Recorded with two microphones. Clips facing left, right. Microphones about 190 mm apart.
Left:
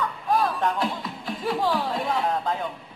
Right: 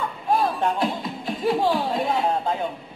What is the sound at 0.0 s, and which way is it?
Music, 25° right (ahead or behind).